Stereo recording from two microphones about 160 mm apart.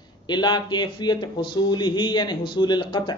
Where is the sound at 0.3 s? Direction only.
25° left (ahead or behind).